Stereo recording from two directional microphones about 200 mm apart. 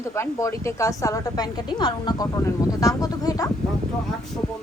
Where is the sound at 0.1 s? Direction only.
15° left (ahead or behind).